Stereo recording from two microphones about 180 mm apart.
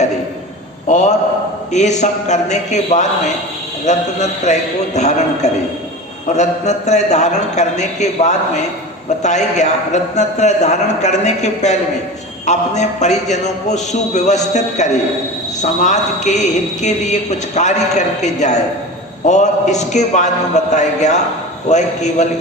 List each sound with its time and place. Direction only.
0.9 s a man's voice: 40° left (ahead or behind)